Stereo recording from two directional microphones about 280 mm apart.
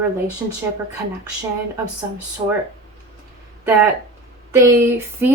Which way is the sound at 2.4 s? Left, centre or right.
Centre.